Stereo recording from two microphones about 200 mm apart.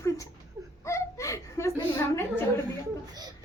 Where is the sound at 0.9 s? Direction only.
15° left (ahead or behind).